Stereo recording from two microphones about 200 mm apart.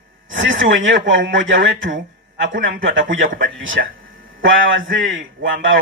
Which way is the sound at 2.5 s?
45° right (ahead or behind).